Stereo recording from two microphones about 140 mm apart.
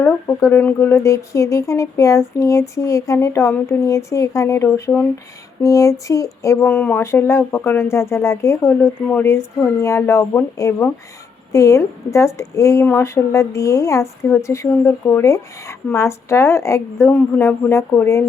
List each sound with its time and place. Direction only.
0.0 s a woman's voice: 20° left (ahead or behind)
6.7 s a woman's voice: 10° left (ahead or behind)